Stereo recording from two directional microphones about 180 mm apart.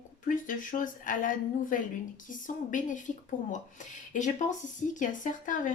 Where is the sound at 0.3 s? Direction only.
45° left (ahead or behind).